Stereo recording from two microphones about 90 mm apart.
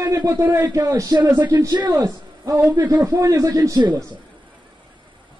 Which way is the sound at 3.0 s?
35° right (ahead or behind).